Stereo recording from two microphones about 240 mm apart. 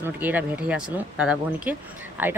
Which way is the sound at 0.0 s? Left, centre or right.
Centre.